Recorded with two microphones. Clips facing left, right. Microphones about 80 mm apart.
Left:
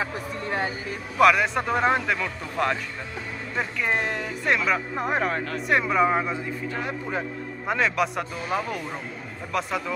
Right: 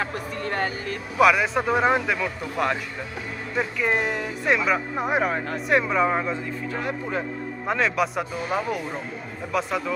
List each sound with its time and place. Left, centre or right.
0.0 s vehicle: right
1.1 s speech: centre